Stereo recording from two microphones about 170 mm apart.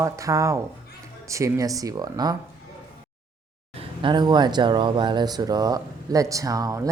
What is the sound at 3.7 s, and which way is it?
Speech, 30° right (ahead or behind).